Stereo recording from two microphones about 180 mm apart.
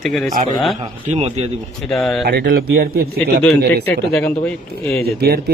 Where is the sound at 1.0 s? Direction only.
35° right (ahead or behind).